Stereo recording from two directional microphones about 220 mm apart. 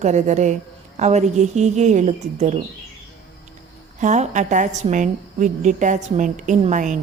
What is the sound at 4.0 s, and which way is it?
A woman's voice, 35° right (ahead or behind).